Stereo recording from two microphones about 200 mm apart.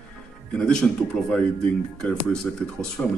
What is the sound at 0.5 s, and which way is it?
Speech, 5° left (ahead or behind).